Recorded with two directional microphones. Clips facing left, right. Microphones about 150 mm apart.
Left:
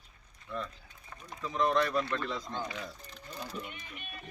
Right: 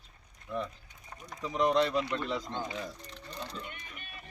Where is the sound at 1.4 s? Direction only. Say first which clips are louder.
Right 2 dB; 15° right (ahead or behind).